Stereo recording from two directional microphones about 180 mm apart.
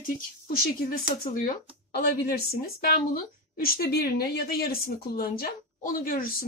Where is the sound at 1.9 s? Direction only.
60° left (ahead or behind).